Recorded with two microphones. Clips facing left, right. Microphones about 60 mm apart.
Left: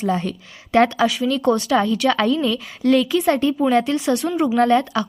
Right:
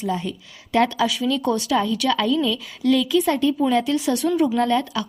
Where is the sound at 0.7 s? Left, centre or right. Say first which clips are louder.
Left 3 dB; left.